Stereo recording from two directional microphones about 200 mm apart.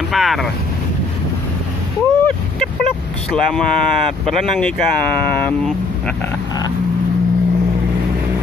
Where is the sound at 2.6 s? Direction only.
5° left (ahead or behind).